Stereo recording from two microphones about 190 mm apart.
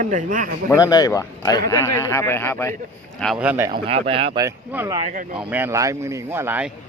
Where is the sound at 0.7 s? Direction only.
20° left (ahead or behind).